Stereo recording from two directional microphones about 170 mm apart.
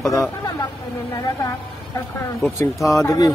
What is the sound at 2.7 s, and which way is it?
Speech, centre (ahead or behind).